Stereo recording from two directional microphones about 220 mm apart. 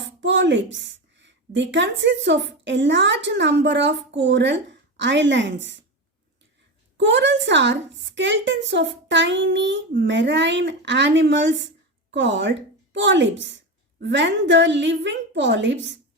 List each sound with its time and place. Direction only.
0.0 s a woman's voice: 55° right (ahead or behind)
6.9 s a woman's voice: 55° right (ahead or behind)